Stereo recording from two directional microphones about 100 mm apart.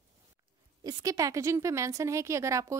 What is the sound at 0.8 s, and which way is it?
A woman's voice, 35° right (ahead or behind).